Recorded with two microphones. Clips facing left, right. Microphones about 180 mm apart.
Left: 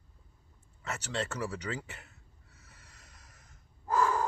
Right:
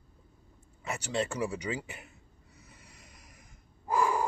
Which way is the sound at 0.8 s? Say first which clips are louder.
Right 3 dB; 10° right (ahead or behind).